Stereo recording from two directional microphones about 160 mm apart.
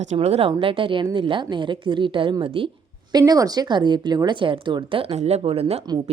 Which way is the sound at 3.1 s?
25° right (ahead or behind).